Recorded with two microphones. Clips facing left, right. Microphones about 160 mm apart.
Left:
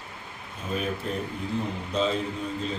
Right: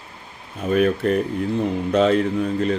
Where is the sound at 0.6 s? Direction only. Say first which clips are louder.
Right 12 dB; 70° right (ahead or behind).